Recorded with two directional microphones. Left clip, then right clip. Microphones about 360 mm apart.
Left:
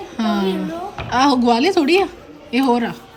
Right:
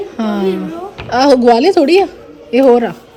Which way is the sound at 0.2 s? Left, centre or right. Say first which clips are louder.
Right 3 dB; centre.